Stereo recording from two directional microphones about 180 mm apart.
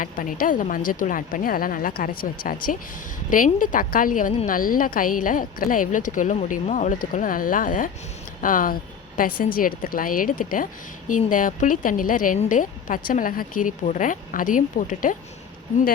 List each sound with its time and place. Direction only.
0.0 s a woman's voice: 50° left (ahead or behind)